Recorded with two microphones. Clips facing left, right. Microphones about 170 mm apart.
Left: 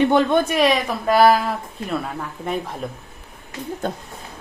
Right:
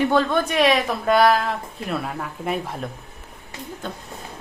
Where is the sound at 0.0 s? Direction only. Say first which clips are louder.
Left 3 dB; 20° left (ahead or behind).